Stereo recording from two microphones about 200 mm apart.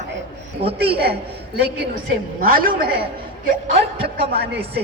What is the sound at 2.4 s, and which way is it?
Speech, 45° right (ahead or behind).